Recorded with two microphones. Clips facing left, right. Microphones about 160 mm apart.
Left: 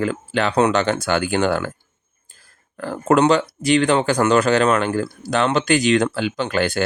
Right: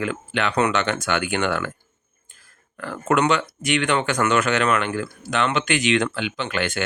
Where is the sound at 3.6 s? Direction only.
35° left (ahead or behind).